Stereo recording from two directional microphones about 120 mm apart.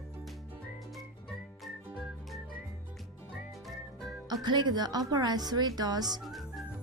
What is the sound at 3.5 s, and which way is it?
Music, centre (ahead or behind).